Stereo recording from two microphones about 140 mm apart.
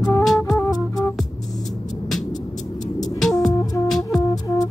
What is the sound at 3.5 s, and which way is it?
Music, 25° left (ahead or behind).